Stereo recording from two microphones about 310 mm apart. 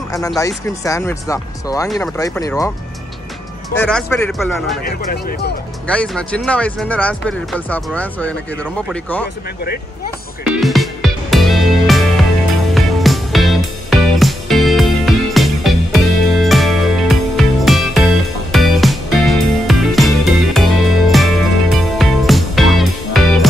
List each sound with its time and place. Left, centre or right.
0.3 s speech: centre
3.7 s speech: centre
4.8 s speech: left
5.9 s speech: centre
10.5 s music: centre